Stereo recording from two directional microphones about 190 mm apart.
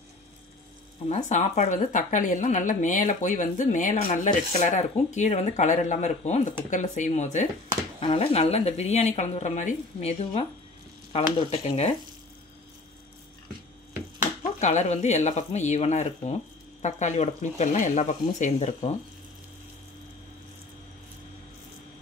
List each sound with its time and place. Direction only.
1.0 s speech: 40° left (ahead or behind)
14.6 s speech: 40° left (ahead or behind)